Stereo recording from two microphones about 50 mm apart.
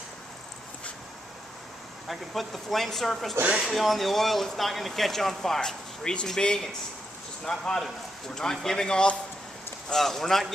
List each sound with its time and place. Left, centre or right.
2.0 s speech: centre
3.4 s speech: centre
3.7 s speech: centre